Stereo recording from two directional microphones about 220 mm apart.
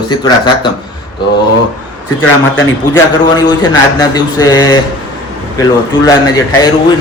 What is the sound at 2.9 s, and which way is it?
Speech, 15° left (ahead or behind).